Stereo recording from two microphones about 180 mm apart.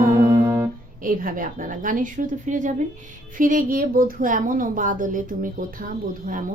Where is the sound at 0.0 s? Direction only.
50° right (ahead or behind).